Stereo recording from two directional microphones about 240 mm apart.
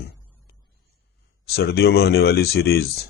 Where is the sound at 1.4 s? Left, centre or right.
Left.